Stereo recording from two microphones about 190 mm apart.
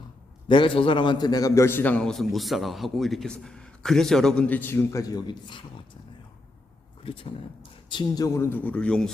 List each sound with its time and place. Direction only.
0.4 s a man's voice: 25° left (ahead or behind)
7.0 s a man's voice: 30° left (ahead or behind); by 9.1 s 5° left (ahead or behind)